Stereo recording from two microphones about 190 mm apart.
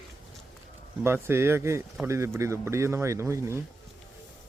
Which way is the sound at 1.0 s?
10° right (ahead or behind).